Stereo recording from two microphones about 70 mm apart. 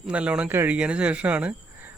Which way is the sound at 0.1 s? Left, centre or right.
Centre.